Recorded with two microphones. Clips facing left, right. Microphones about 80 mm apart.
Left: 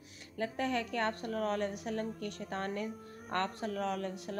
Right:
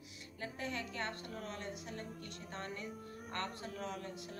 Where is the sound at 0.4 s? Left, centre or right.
Left.